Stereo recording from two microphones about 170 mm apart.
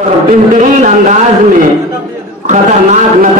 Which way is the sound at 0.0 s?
50° right (ahead or behind).